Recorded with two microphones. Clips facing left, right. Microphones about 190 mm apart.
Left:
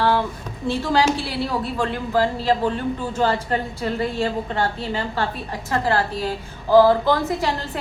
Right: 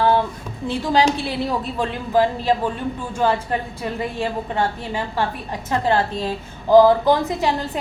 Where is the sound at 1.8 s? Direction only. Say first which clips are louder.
Right 3 dB; 20° right (ahead or behind).